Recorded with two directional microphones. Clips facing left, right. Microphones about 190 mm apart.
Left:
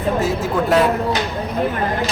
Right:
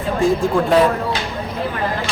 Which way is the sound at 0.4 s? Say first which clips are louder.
Right 2 dB; 5° left (ahead or behind).